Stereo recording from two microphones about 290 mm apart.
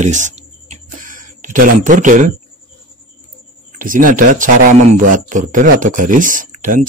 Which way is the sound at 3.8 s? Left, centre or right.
Right.